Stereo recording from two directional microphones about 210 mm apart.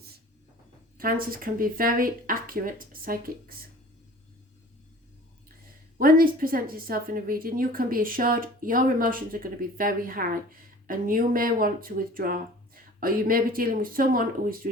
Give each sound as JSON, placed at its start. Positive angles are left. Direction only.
{"t": 0.9, "sound": "a woman's voice", "side_deg": -45}
{"t": 6.0, "sound": "a woman's voice", "side_deg": -45}